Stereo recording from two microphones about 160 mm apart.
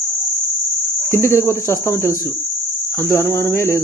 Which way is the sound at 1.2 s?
15° left (ahead or behind).